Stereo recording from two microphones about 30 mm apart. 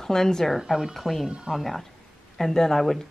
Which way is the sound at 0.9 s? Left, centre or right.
Centre.